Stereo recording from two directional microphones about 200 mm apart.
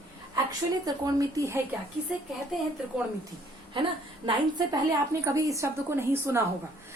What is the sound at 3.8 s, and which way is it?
A woman's voice, 25° right (ahead or behind).